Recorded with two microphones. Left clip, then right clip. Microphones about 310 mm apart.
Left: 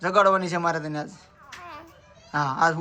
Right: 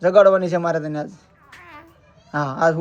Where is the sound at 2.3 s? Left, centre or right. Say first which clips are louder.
Right 3 dB; centre.